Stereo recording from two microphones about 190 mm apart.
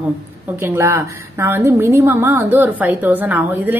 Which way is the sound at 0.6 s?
15° right (ahead or behind).